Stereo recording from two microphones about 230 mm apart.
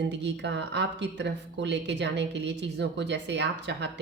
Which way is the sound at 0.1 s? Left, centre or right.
Right.